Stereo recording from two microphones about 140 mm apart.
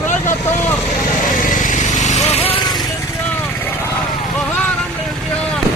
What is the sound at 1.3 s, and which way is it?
Vehicle, 70° left (ahead or behind).